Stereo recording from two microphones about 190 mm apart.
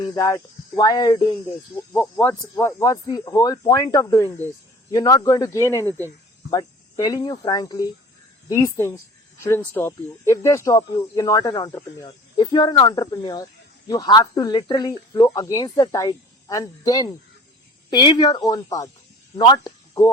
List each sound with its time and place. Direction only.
0.0 s speech: 15° left (ahead or behind)
1.7 s speech: 15° left (ahead or behind)